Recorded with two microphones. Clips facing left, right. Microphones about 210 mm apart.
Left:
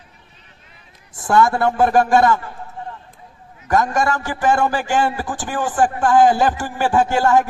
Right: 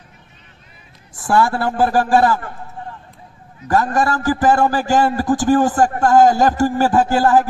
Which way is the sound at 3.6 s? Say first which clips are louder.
Right 1 dB; 35° right (ahead or behind).